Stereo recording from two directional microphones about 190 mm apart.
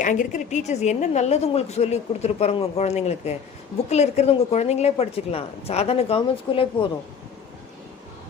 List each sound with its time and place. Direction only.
0.0 s a woman's voice: 40° left (ahead or behind)